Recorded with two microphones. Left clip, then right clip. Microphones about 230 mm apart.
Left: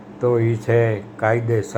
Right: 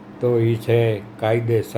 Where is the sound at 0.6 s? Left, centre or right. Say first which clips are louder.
Left 2 dB; centre.